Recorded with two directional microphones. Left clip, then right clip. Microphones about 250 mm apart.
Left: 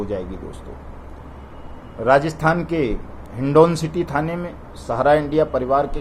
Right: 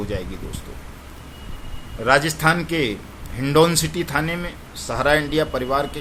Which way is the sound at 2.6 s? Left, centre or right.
Centre.